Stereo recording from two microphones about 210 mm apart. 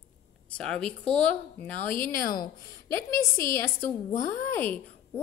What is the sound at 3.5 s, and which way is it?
A woman's voice, 10° left (ahead or behind).